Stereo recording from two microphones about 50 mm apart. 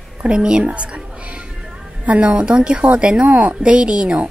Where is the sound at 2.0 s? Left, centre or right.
Right.